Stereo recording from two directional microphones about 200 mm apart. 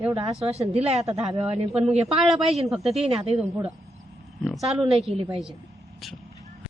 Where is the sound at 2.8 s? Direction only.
30° right (ahead or behind).